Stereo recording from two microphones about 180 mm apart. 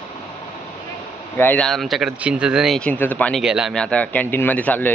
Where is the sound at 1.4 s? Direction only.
5° left (ahead or behind).